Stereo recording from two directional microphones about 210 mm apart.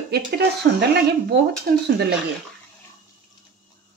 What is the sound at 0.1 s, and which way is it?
Speech, 50° right (ahead or behind).